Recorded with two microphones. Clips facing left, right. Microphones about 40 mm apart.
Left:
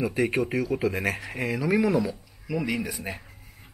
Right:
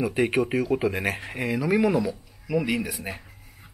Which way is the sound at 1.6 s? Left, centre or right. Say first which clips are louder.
Right 1 dB; centre.